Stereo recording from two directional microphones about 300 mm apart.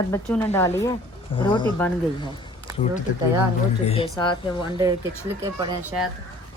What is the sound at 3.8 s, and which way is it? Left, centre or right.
Speech, centre.